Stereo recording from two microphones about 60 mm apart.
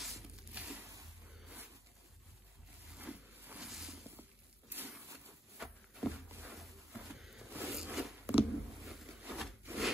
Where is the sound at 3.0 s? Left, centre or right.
Right.